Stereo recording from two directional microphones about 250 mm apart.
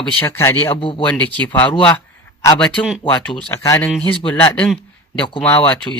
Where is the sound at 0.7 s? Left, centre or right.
Centre.